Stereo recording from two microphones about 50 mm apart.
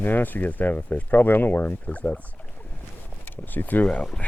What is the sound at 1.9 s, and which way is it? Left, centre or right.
Speech, left.